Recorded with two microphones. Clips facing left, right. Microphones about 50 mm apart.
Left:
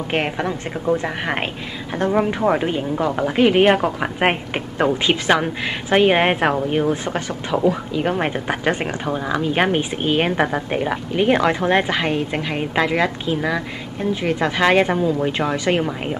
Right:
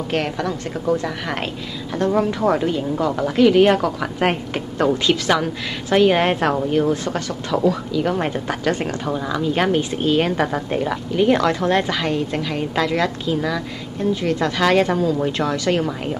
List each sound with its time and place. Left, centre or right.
0.1 s speech: left